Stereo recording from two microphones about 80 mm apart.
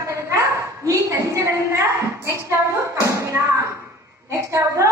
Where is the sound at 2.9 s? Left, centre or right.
Right.